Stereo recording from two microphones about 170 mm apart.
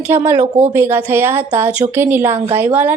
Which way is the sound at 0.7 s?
15° right (ahead or behind).